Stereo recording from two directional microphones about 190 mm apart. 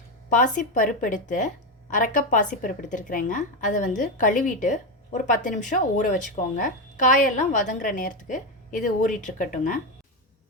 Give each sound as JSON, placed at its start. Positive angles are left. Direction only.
{"t": 0.3, "sound": "a woman's voice", "side_deg": 40}